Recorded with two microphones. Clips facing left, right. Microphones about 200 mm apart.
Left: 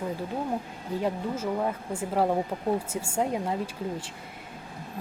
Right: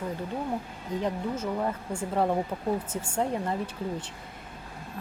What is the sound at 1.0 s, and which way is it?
A woman's voice, 10° left (ahead or behind).